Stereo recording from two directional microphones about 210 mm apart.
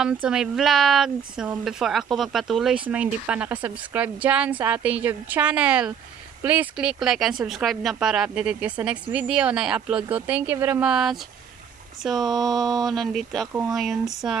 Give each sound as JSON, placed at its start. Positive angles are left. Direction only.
{"t": 0.0, "sound": "a woman's voice", "side_deg": -5}
{"t": 12.3, "sound": "a sound", "side_deg": -20}
{"t": 12.9, "sound": "speech", "side_deg": 0}
{"t": 13.5, "sound": "a woman's voice", "side_deg": -10}